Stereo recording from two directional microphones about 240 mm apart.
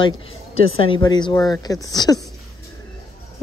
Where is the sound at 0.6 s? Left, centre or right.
Left.